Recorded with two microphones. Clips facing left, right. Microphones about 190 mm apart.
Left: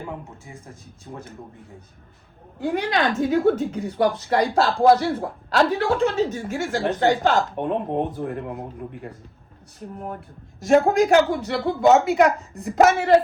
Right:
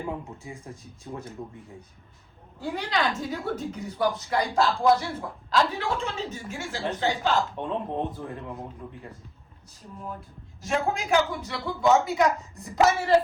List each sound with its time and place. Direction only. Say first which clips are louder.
2.6 s a woman's voice: left 6 dB; 55° left (ahead or behind)
10.0 s a woman's voice: left 4 dB; 60° left (ahead or behind)
10.7 s a man's voice: left 10 dB; 50° left (ahead or behind)
11.0 s speech: left 8 dB; 70° left (ahead or behind)
11.6 s speech: left 5 dB; 25° left (ahead or behind)
12.0 s a woman's voice: left 6 dB; 60° left (ahead or behind)